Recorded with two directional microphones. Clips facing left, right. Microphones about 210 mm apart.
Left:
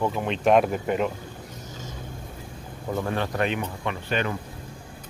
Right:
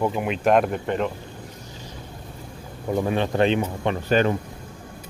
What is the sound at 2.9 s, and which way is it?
Speech, 20° right (ahead or behind).